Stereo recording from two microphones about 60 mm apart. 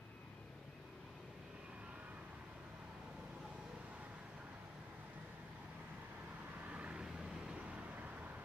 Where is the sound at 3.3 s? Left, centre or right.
Centre.